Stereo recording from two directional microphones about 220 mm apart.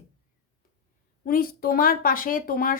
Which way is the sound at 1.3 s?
40° left (ahead or behind).